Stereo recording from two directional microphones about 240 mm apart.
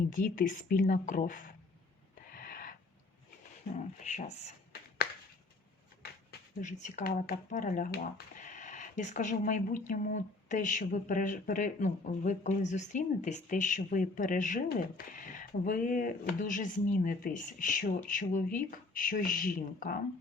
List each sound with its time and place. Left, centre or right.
0.1 s speech: left
2.1 s wheeze: left
3.8 s speech: left
6.6 s speech: left